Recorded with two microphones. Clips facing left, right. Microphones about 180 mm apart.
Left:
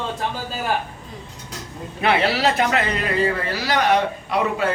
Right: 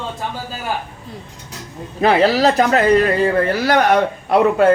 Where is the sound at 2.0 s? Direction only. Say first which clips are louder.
Right 6 dB; 40° right (ahead or behind).